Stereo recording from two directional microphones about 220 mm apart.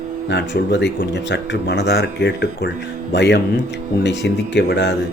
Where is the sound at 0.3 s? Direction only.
50° left (ahead or behind).